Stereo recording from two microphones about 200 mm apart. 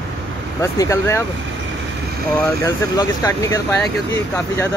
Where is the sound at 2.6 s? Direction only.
15° left (ahead or behind).